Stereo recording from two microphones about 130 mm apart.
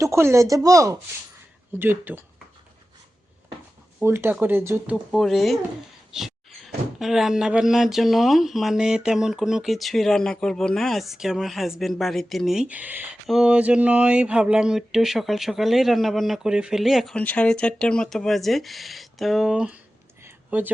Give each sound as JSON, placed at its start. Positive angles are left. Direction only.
{"t": 0.0, "sound": "speech", "side_deg": -20}
{"t": 1.8, "sound": "speech", "side_deg": -15}
{"t": 4.0, "sound": "speech", "side_deg": -20}
{"t": 5.1, "sound": "speech", "side_deg": 0}
{"t": 17.2, "sound": "speech", "side_deg": 10}
{"t": 20.2, "sound": "a sound", "side_deg": -15}